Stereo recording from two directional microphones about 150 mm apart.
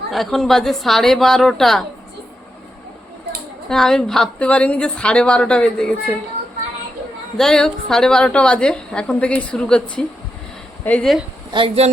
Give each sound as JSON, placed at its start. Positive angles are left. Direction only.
{"t": 0.1, "sound": "a woman's voice", "side_deg": 0}
{"t": 3.7, "sound": "a woman's voice", "side_deg": 5}
{"t": 7.3, "sound": "a woman's voice", "side_deg": 5}
{"t": 10.8, "sound": "a woman's voice", "side_deg": 5}
{"t": 11.5, "sound": "speech", "side_deg": -40}